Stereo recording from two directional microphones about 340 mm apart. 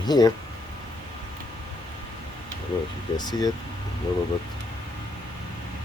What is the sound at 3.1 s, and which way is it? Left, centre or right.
Speech, centre.